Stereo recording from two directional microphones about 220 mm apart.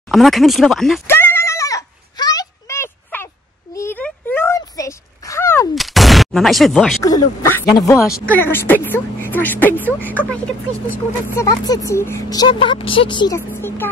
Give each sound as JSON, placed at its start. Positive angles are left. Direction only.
{"t": 0.1, "sound": "goat", "side_deg": 0}
{"t": 3.7, "sound": "a sound", "side_deg": 10}
{"t": 5.8, "sound": "gunshot", "side_deg": 0}
{"t": 7.0, "sound": "speech", "side_deg": 15}
{"t": 13.5, "sound": "speech", "side_deg": 10}